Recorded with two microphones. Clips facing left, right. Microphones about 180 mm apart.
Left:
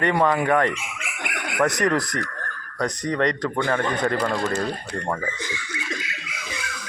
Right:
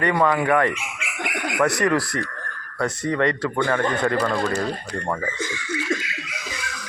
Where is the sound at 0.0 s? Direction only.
20° left (ahead or behind).